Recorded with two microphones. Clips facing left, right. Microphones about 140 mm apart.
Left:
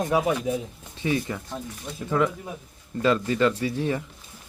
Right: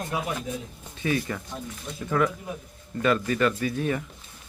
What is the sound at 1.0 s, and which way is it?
Speech, 25° left (ahead or behind).